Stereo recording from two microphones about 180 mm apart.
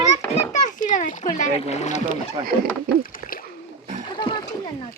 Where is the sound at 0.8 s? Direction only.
45° left (ahead or behind).